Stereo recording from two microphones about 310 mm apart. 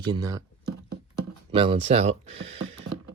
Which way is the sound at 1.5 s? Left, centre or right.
Centre.